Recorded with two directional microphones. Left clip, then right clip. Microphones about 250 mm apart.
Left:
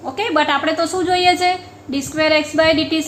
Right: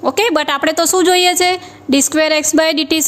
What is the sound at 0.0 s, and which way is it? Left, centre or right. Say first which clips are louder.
A woman's voice: right 4 dB; right.